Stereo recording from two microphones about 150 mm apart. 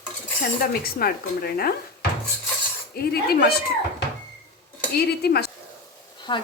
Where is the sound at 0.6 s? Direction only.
80° left.